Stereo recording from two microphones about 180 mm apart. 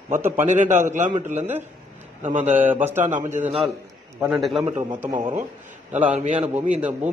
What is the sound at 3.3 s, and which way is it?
Speech, 40° right (ahead or behind).